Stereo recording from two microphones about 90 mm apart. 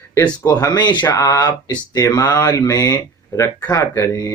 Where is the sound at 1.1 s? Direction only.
40° left (ahead or behind).